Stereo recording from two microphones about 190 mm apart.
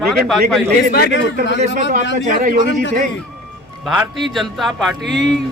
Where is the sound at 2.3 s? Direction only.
45° right (ahead or behind).